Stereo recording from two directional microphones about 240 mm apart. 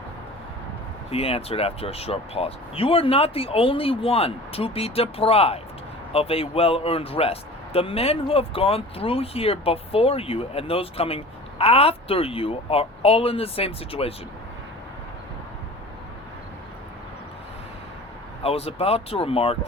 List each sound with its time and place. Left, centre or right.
1.1 s speech: left
18.4 s speech: left